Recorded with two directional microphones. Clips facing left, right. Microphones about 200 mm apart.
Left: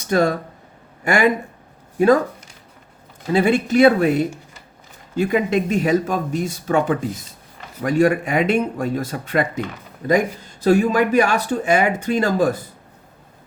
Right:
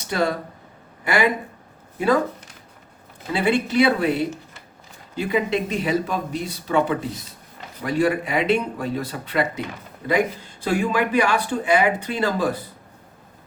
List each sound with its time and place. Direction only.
0.1 s speech: 45° left (ahead or behind)
3.3 s speech: 45° left (ahead or behind)